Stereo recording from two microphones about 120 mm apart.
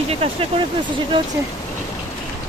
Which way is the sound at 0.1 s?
55° right (ahead or behind).